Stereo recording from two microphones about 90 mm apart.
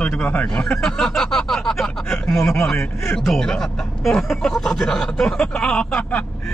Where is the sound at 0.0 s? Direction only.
15° left (ahead or behind).